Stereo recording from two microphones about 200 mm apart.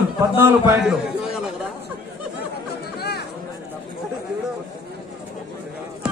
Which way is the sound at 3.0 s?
55° left (ahead or behind).